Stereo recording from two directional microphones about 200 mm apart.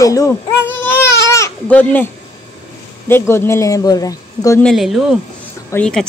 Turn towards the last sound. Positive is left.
turn(degrees=5)  # may be behind; listen again after turning